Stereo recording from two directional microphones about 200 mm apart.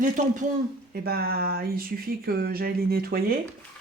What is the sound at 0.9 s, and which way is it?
Speech, 50° right (ahead or behind).